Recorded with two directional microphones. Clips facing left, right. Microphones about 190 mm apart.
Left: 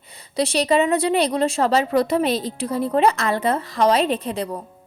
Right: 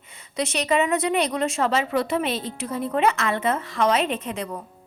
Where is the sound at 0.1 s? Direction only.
35° left (ahead or behind).